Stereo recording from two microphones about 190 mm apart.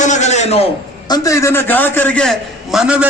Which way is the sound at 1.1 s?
20° left (ahead or behind).